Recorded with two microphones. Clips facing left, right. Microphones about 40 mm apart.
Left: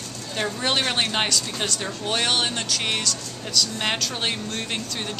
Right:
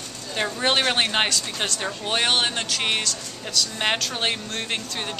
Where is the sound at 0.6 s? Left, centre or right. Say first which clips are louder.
Right 3 dB; centre.